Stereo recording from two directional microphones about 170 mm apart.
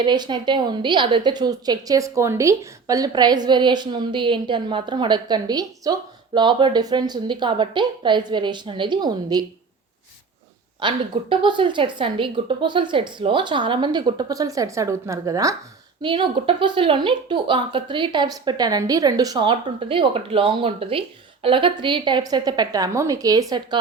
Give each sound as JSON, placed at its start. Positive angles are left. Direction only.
{"t": 0.0, "sound": "a woman's voice", "side_deg": -25}
{"t": 10.8, "sound": "a woman's voice", "side_deg": -30}